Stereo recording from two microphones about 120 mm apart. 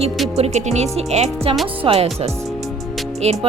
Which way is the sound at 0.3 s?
65° right (ahead or behind).